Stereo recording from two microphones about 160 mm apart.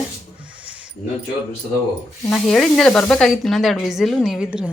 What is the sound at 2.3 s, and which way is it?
Speech, centre (ahead or behind).